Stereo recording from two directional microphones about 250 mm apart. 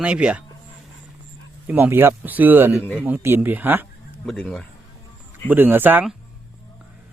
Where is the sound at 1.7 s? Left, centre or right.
Centre.